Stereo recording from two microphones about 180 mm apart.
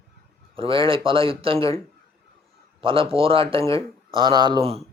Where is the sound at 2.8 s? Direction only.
30° right (ahead or behind).